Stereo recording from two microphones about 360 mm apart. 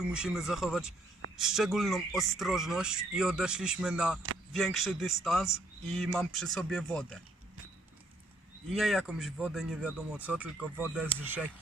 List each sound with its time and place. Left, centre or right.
0.0 s speech: centre
8.7 s speech: centre